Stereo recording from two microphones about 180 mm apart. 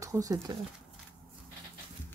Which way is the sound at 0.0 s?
20° right (ahead or behind).